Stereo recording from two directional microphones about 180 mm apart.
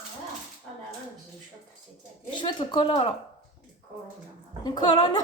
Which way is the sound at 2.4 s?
25° left (ahead or behind).